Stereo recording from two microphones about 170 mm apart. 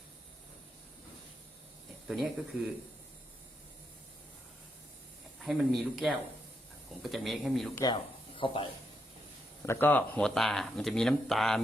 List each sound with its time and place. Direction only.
2.0 s speech: centre (ahead or behind)
5.5 s speech: centre (ahead or behind)
7.9 s a sound: 30° left (ahead or behind)
9.6 s speech: 10° left (ahead or behind)